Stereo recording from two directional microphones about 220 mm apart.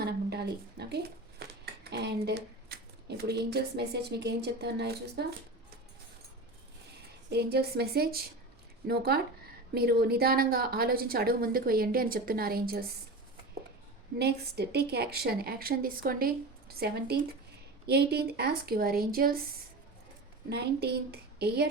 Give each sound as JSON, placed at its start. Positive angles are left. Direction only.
{"t": 0.0, "sound": "speech", "side_deg": -50}
{"t": 7.3, "sound": "a woman's voice", "side_deg": -45}
{"t": 14.2, "sound": "a woman's voice", "side_deg": -50}
{"t": 20.5, "sound": "a woman's voice", "side_deg": -45}